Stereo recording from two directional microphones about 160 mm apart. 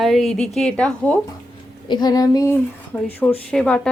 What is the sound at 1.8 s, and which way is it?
Speech, 25° left (ahead or behind).